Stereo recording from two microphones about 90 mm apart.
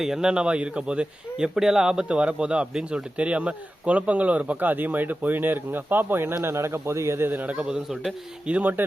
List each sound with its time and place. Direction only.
0.0 s speech: 5° right (ahead or behind)
8.4 s speech: 15° right (ahead or behind)